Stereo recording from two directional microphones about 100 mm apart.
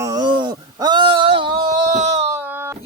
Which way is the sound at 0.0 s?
35° right (ahead or behind).